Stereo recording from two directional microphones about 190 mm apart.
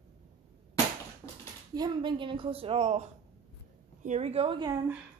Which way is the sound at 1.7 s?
20° right (ahead or behind).